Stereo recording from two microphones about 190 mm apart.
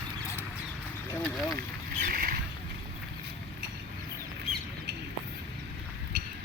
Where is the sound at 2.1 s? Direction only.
50° right (ahead or behind).